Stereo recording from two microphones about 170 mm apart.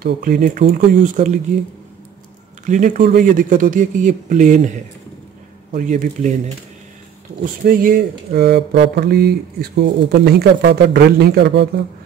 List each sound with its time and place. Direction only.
0.0 s speech: 60° right (ahead or behind)
2.6 s speech: 45° right (ahead or behind)
5.7 s speech: 50° right (ahead or behind)
7.6 s speech: 60° right (ahead or behind); by 11.7 s 85° right